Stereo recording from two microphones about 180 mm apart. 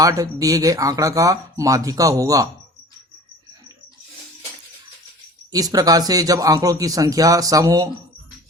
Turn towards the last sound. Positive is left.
turn(degrees=-20)  # may be behind; listen again after turning